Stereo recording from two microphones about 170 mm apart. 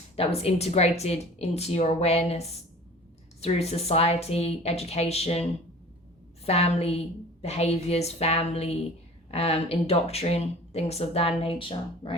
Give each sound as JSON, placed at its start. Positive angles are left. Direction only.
{"t": 0.2, "sound": "a woman's voice", "side_deg": 35}